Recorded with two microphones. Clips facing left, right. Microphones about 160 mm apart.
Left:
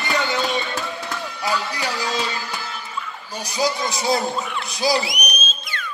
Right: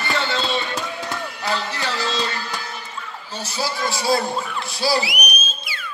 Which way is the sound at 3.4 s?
15° left (ahead or behind).